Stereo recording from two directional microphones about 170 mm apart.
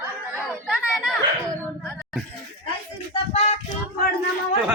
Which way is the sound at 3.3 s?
40° left (ahead or behind).